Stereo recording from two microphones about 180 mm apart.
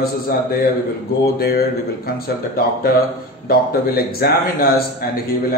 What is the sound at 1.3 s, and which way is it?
Speech, 60° left (ahead or behind).